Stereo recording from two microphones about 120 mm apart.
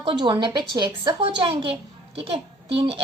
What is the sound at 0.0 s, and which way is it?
A woman's voice, 40° right (ahead or behind).